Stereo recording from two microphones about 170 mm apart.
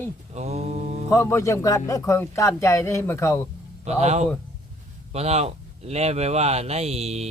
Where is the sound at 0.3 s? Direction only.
40° right (ahead or behind).